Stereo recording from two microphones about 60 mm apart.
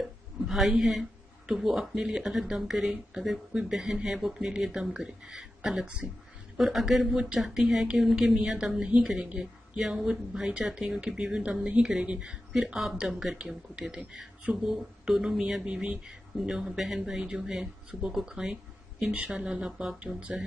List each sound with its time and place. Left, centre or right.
0.0 s a sound: centre
1.5 s a woman's voice: centre
20.2 s a woman's voice: right